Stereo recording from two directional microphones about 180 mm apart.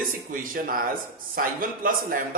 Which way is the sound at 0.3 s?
50° right (ahead or behind).